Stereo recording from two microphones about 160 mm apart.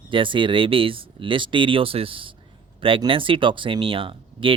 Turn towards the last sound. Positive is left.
turn(degrees=-35)  # may be behind; listen again after turning